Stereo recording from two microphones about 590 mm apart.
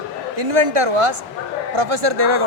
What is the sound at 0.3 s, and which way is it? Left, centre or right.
A man's voice, right.